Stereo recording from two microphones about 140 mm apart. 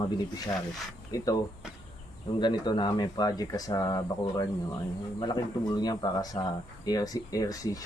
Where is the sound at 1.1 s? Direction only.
25° left (ahead or behind).